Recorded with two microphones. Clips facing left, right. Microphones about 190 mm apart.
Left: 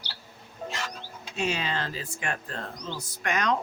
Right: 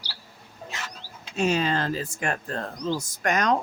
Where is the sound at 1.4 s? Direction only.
45° right (ahead or behind).